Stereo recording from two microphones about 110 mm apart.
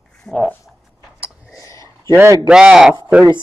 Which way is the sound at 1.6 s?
30° left (ahead or behind).